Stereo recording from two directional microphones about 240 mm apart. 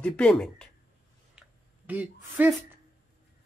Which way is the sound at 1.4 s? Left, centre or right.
Centre.